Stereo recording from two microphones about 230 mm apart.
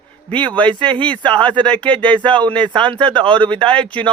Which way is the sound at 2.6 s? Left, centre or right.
Right.